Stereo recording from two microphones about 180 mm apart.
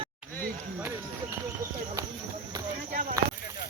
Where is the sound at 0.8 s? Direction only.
10° right (ahead or behind).